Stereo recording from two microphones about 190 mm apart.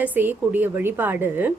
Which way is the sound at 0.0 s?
10° right (ahead or behind).